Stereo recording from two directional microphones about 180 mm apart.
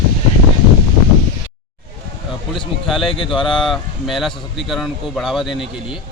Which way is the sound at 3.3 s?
5° left (ahead or behind).